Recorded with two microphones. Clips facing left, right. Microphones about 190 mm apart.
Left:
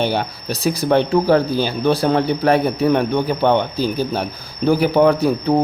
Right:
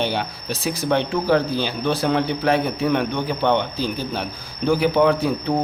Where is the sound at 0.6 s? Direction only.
40° left (ahead or behind).